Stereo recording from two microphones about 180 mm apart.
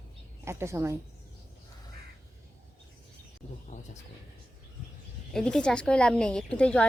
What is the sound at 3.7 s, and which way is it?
Speech, 40° left (ahead or behind).